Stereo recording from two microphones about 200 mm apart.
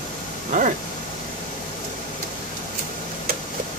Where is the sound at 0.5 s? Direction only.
40° right (ahead or behind).